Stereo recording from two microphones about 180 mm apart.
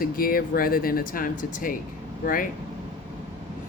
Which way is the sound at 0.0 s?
50° left (ahead or behind).